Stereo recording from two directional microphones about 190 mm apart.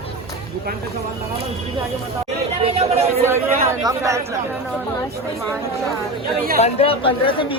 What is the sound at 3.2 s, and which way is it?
Speech, 15° right (ahead or behind).